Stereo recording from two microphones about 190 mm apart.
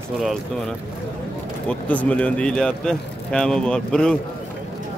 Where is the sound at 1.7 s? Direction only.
5° left (ahead or behind).